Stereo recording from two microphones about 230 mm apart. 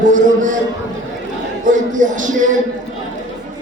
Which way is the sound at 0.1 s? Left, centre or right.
Right.